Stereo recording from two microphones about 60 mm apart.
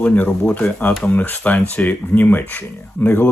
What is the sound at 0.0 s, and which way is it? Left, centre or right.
Speech, left.